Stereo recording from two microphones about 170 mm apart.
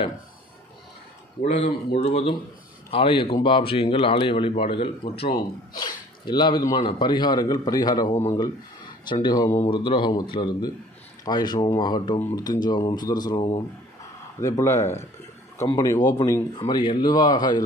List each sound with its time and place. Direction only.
2.0 s a man's voice: 35° left (ahead or behind)
5.1 s speech: 65° left (ahead or behind)
5.8 s speech: 25° left (ahead or behind)
8.1 s a man's voice: 40° left (ahead or behind)
8.4 s speech: 25° left (ahead or behind)